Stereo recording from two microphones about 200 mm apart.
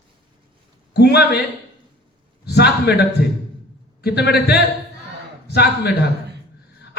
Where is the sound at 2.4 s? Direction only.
55° left (ahead or behind).